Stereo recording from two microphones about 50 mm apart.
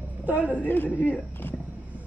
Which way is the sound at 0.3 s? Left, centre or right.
Right.